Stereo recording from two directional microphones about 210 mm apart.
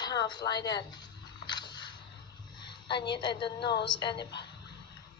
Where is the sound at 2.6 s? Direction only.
20° left (ahead or behind).